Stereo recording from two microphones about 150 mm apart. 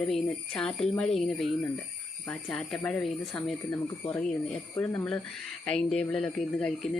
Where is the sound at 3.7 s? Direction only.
15° left (ahead or behind).